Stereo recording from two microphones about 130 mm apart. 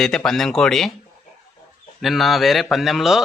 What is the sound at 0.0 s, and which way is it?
Speech, 5° left (ahead or behind).